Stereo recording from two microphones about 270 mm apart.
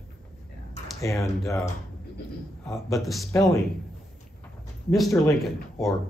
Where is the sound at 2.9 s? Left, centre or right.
Centre.